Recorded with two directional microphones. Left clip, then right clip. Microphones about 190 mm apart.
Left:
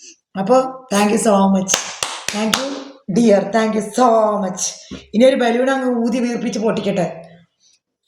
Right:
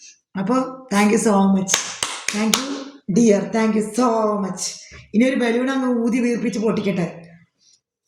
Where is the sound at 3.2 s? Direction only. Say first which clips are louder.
Left 5 dB; 20° right (ahead or behind).